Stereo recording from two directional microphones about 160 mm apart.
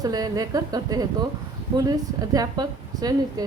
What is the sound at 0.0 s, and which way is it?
A woman's voice, 25° right (ahead or behind).